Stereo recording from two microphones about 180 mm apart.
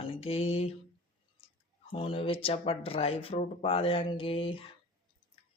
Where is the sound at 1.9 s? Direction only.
30° left (ahead or behind).